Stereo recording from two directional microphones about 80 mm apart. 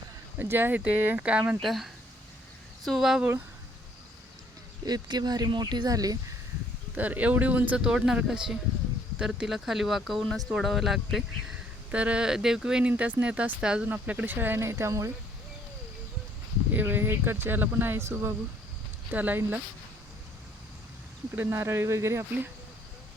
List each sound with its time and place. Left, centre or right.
0.3 s speech: right
1.6 s speech: centre
4.9 s speech: right
6.9 s speech: right
7.9 s speech: centre
11.9 s speech: centre
12.9 s speech: right
16.7 s speech: right
21.5 s speech: right